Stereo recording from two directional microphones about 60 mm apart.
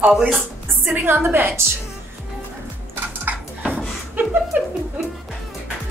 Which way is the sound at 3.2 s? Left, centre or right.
Right.